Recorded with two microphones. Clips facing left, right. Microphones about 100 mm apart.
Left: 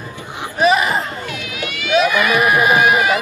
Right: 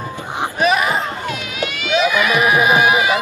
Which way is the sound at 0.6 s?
Centre (ahead or behind).